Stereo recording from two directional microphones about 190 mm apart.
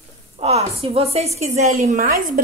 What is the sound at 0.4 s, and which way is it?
A woman's voice, 30° right (ahead or behind).